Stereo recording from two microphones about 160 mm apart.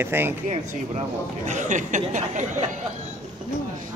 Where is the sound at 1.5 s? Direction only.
50° right (ahead or behind).